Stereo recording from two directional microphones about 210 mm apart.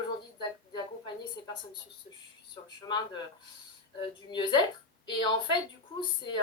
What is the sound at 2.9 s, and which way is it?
A woman's voice, 20° left (ahead or behind).